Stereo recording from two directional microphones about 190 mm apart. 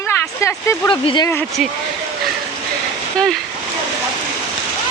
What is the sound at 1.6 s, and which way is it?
Speech, centre (ahead or behind).